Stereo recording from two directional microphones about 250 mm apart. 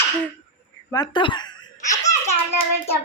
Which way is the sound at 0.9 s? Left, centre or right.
Centre.